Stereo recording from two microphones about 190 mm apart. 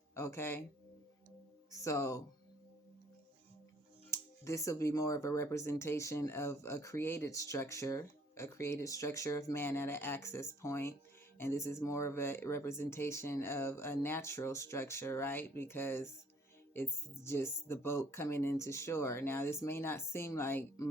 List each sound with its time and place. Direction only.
0.1 s speech: 15° left (ahead or behind)
1.8 s speech: 15° left (ahead or behind)
4.1 s speech: 15° left (ahead or behind)